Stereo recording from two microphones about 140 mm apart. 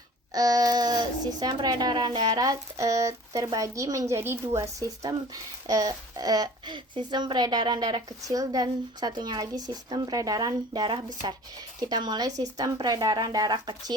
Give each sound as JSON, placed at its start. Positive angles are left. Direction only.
{"t": 0.3, "sound": "speech", "side_deg": -25}